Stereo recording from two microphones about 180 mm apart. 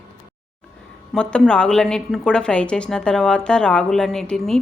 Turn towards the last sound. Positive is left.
turn(degrees=0)  # may be behind; listen again after turning